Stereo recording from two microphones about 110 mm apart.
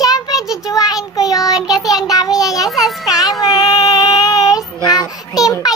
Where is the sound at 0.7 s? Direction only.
35° left (ahead or behind).